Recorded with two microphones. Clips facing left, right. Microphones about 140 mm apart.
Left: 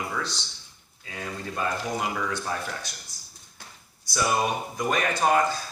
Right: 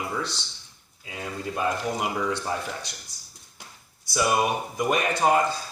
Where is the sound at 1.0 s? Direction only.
15° right (ahead or behind).